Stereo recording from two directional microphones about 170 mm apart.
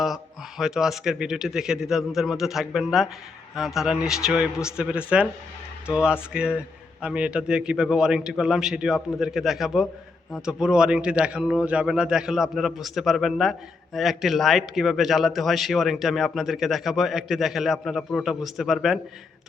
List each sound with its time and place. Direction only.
0.6 s a man's voice: 5° right (ahead or behind)